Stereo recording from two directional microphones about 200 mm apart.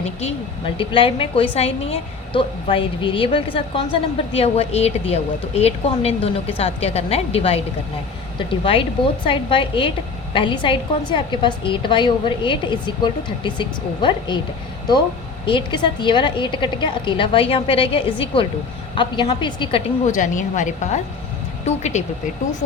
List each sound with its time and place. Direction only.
0.0 s a woman's voice: 30° left (ahead or behind)
15.4 s a woman's voice: 25° left (ahead or behind)
20.1 s a woman's voice: 40° left (ahead or behind)